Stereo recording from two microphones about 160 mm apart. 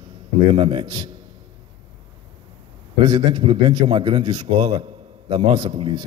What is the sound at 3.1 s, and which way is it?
A man's voice, 30° right (ahead or behind).